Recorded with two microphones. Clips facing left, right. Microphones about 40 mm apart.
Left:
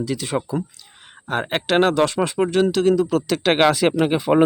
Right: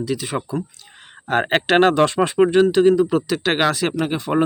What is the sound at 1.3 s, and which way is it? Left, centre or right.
Speech, right.